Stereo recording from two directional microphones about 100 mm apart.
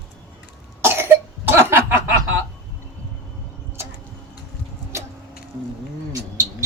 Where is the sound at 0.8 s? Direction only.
25° right (ahead or behind).